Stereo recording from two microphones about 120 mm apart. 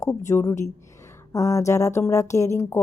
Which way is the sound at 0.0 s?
25° left (ahead or behind).